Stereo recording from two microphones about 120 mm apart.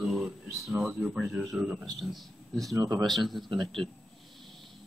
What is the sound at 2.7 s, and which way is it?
Speech, 30° right (ahead or behind).